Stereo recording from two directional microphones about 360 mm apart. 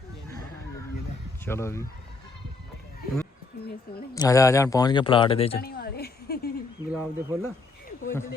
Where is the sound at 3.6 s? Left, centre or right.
Left.